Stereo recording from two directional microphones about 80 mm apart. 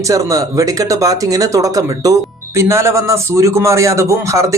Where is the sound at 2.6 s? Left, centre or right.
Right.